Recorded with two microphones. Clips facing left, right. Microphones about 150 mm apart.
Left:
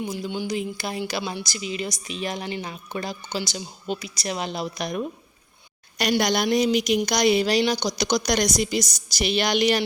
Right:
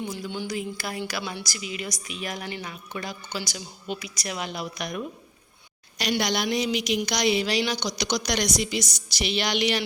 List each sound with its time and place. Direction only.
0.0 s a woman's voice: 15° left (ahead or behind)
6.0 s a woman's voice: 50° left (ahead or behind)